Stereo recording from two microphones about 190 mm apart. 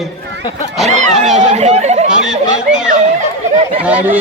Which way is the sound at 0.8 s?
40° right (ahead or behind).